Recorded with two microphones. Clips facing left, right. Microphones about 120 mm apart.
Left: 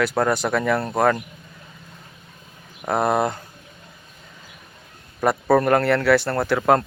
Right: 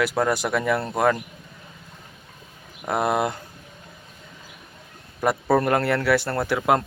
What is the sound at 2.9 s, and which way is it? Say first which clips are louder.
Speech: left 2 dB; 30° left (ahead or behind).